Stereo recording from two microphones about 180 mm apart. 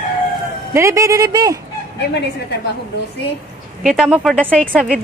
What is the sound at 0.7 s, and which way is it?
Speech, 15° right (ahead or behind).